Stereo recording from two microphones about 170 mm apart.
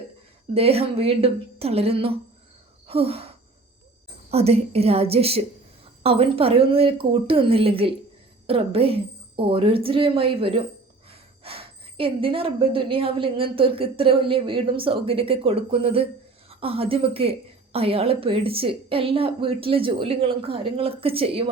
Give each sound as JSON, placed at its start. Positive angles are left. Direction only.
{"t": 0.5, "sound": "a woman's voice", "side_deg": -35}
{"t": 2.8, "sound": "a sound", "side_deg": -35}
{"t": 4.3, "sound": "a woman's voice", "side_deg": -35}